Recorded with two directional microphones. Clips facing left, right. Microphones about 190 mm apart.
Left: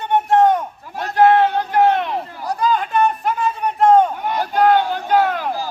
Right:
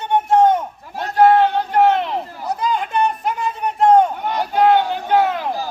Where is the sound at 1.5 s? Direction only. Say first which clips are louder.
Even; 25° right (ahead or behind).